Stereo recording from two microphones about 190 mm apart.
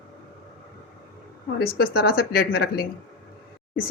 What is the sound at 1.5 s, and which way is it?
A woman's voice, 55° left (ahead or behind).